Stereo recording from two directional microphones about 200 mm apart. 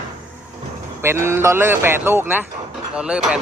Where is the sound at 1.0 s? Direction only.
10° right (ahead or behind).